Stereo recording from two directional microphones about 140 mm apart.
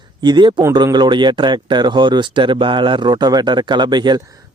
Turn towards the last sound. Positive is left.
turn(degrees=-30)  # may be behind; listen again after turning